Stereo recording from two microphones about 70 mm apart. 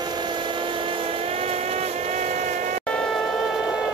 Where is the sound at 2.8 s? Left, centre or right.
Centre.